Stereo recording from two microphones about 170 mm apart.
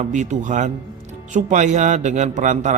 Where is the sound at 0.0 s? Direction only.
45° right (ahead or behind).